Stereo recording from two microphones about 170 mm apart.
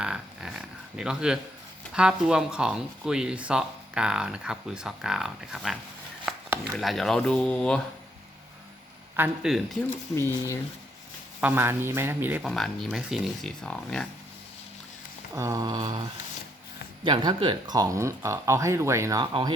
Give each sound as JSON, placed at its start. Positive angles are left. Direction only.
{"t": 0.0, "sound": "a sound", "side_deg": -5}
{"t": 1.9, "sound": "speech", "side_deg": -5}
{"t": 6.3, "sound": "chopping", "side_deg": 0}
{"t": 6.7, "sound": "speech", "side_deg": 0}
{"t": 9.1, "sound": "speech", "side_deg": -5}
{"t": 10.2, "sound": "speech", "side_deg": 15}
{"t": 11.3, "sound": "speech", "side_deg": -10}
{"t": 12.4, "sound": "speech", "side_deg": 0}
{"t": 15.4, "sound": "a sound", "side_deg": -20}
{"t": 17.0, "sound": "speech", "side_deg": -25}
{"t": 19.2, "sound": "a sound", "side_deg": -25}